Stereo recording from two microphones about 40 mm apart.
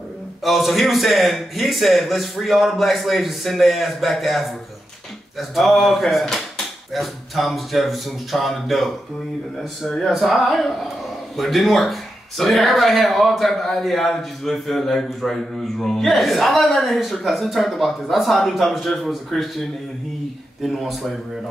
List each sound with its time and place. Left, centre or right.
0.4 s a man's voice: centre
20.6 s a man's voice: centre